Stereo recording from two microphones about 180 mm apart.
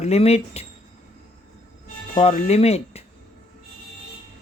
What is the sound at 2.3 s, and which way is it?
Speech, 35° left (ahead or behind).